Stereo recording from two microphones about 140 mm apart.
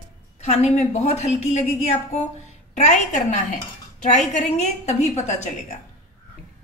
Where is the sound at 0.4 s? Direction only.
50° left (ahead or behind).